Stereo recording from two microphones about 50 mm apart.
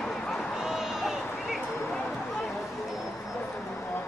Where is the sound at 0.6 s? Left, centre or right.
Centre.